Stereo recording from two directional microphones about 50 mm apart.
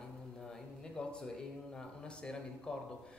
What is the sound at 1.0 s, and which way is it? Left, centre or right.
A man's voice, centre.